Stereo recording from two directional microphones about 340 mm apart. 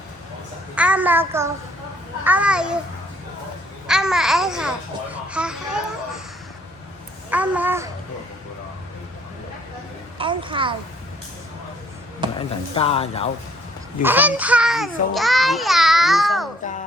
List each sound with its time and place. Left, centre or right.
0.8 s a child's voice: centre
3.8 s a child's voice: centre
7.3 s speech: centre
10.2 s a child's voice: centre
12.4 s speech: centre
14.0 s a child's voice: centre